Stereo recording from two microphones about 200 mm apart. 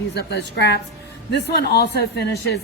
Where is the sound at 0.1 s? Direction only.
55° left (ahead or behind).